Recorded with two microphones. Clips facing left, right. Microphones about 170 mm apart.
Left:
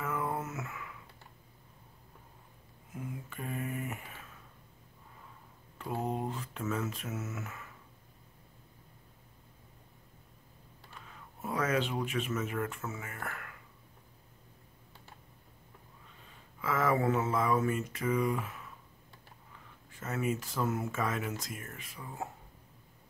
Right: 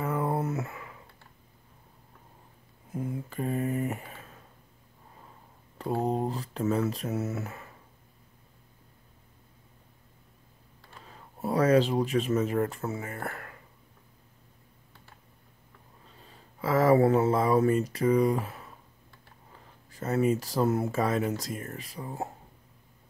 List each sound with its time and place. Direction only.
0.0 s a sound: 35° right (ahead or behind)
2.9 s speech: 35° right (ahead or behind)
5.8 s speech: 35° right (ahead or behind)
11.0 s speech: 35° right (ahead or behind)
16.1 s speech: 35° right (ahead or behind)